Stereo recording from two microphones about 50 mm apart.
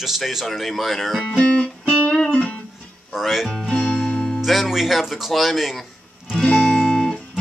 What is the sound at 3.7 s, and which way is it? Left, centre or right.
Music, left.